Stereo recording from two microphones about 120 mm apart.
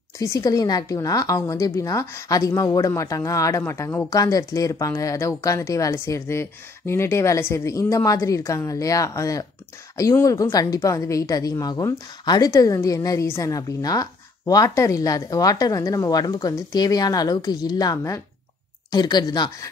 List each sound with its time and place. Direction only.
0.2 s a woman's voice: 25° left (ahead or behind)